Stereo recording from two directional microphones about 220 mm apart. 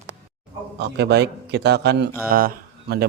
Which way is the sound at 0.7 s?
50° right (ahead or behind).